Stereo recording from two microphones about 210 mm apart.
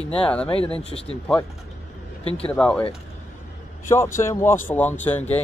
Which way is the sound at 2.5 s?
5° left (ahead or behind).